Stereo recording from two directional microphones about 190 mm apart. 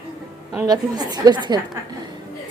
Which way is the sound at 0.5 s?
15° right (ahead or behind).